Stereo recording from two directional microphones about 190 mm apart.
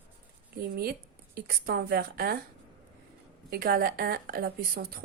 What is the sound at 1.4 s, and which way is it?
A woman's voice, 50° right (ahead or behind).